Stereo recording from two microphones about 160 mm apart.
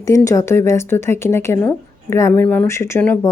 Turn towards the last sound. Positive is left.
turn(degrees=15)  # may be behind; listen again after turning